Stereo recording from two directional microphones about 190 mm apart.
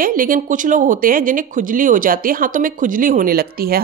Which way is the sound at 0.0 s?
45° right (ahead or behind).